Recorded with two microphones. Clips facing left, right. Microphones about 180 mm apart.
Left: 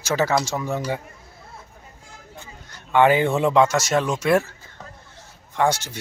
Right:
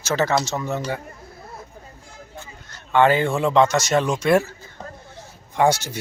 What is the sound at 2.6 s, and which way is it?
Speech, 15° left (ahead or behind).